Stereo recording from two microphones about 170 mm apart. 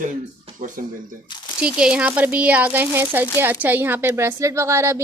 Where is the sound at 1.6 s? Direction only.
5° right (ahead or behind).